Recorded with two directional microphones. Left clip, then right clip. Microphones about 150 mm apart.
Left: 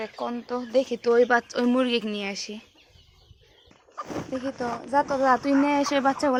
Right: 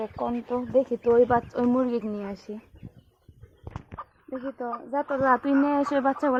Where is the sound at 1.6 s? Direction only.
45° left (ahead or behind).